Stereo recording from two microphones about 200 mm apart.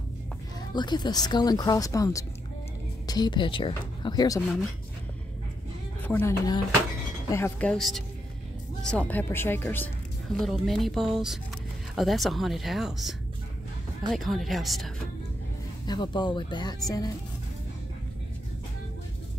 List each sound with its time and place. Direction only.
0.7 s speech: 20° left (ahead or behind)
6.0 s speech: 10° left (ahead or behind)
7.7 s speech: centre (ahead or behind)
14.1 s speech: centre (ahead or behind)
15.9 s speech: 20° left (ahead or behind)